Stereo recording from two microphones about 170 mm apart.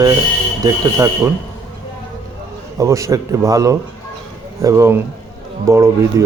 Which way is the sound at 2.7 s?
20° right (ahead or behind).